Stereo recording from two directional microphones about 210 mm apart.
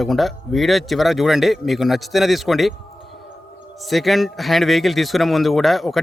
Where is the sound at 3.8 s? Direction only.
Centre (ahead or behind).